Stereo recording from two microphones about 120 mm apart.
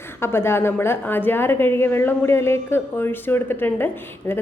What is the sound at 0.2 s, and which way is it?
A woman's voice, 20° left (ahead or behind).